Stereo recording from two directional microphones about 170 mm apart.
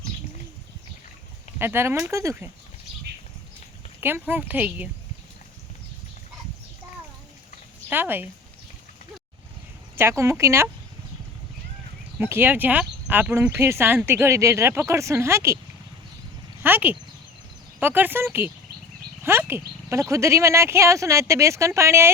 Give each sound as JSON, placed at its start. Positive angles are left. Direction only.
{"t": 1.5, "sound": "speech", "side_deg": -15}
{"t": 4.0, "sound": "speech", "side_deg": -10}
{"t": 7.9, "sound": "speech", "side_deg": -10}
{"t": 9.9, "sound": "speech", "side_deg": -15}
{"t": 12.2, "sound": "speech", "side_deg": -10}
{"t": 16.6, "sound": "speech", "side_deg": -10}